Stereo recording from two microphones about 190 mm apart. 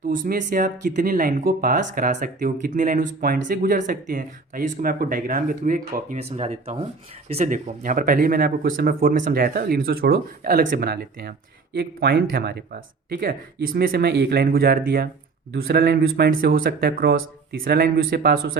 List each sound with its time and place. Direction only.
0.1 s speech: 45° right (ahead or behind)
6.1 s speech: 35° right (ahead or behind); by 18.5 s 55° right (ahead or behind)